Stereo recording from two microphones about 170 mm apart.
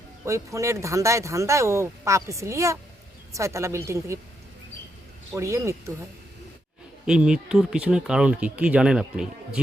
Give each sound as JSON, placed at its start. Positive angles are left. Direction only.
{"t": 0.3, "sound": "speech", "side_deg": -20}
{"t": 5.3, "sound": "speech", "side_deg": -15}
{"t": 7.0, "sound": "speech", "side_deg": -5}